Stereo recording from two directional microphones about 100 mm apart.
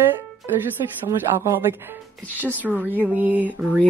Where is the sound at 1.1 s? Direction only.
25° right (ahead or behind).